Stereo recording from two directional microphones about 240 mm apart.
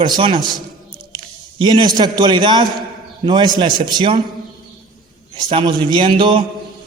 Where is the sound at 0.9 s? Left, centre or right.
Centre.